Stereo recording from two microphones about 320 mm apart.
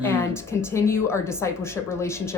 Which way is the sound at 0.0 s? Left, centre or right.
Centre.